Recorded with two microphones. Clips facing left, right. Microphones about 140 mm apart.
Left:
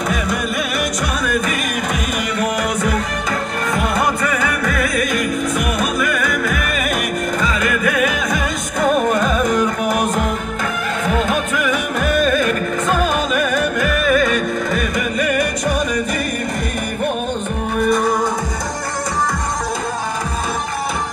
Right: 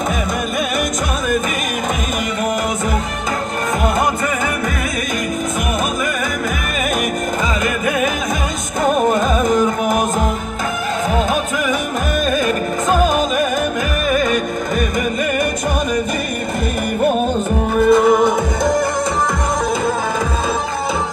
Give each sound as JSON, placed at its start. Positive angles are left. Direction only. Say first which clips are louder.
{"t": 7.6, "sound": "music", "louder": "even", "side_deg": -25}
{"t": 9.1, "sound": "carnatic music", "louder": "right 1 dB", "side_deg": -20}
{"t": 9.5, "sound": "music", "louder": "right 2 dB", "side_deg": 0}
{"t": 11.1, "sound": "music", "louder": "even", "side_deg": -30}
{"t": 12.9, "sound": "music", "louder": "right 4 dB", "side_deg": -35}
{"t": 13.7, "sound": "music", "louder": "left 2 dB", "side_deg": -20}
{"t": 17.8, "sound": "music", "louder": "right 6 dB", "side_deg": -25}